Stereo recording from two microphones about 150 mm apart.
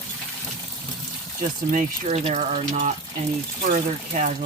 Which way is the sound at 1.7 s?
50° right (ahead or behind).